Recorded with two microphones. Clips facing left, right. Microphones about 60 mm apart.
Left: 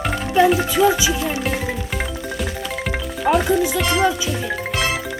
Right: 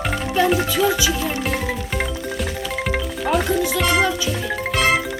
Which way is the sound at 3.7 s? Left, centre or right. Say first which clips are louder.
Right 1 dB; centre.